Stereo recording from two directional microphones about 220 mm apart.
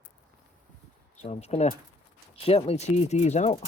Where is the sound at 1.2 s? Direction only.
30° left (ahead or behind).